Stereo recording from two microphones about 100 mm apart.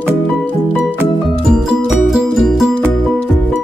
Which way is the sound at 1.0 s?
10° right (ahead or behind).